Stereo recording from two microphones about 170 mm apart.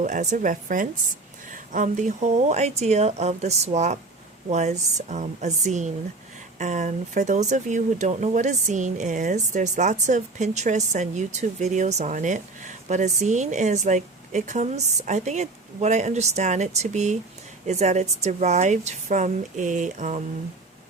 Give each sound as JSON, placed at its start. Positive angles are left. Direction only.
{"t": 0.0, "sound": "speech", "side_deg": -45}